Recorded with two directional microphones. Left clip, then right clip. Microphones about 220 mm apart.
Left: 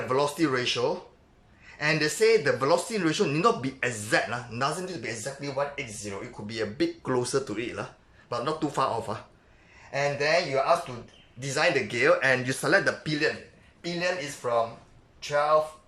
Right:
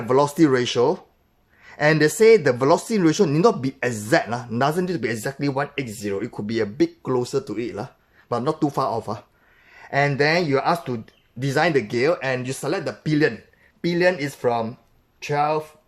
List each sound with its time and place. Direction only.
0.1 s speech: 30° right (ahead or behind)
6.7 s speech: 20° right (ahead or behind)
9.9 s speech: 40° right (ahead or behind)
13.8 s speech: 45° right (ahead or behind)